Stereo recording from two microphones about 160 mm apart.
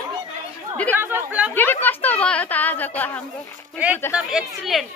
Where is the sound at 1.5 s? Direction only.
10° left (ahead or behind).